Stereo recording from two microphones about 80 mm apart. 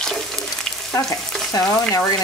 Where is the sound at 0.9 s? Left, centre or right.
Left.